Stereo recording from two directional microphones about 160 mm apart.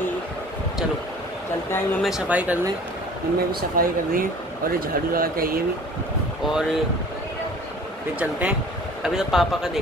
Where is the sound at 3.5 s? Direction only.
60° right (ahead or behind).